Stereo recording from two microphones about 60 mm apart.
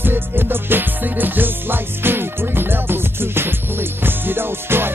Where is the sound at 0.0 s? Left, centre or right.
Right.